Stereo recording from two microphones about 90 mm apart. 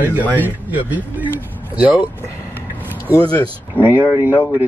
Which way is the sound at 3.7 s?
20° right (ahead or behind).